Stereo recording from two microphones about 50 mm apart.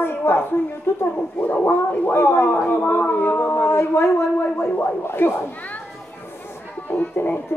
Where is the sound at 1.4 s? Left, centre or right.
Left.